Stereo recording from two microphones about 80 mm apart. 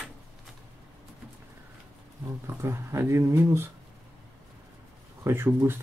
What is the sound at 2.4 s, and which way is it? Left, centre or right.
Speech, right.